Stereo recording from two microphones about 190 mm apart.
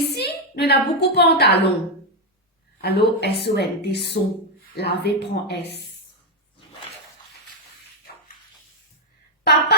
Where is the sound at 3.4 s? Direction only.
60° left (ahead or behind).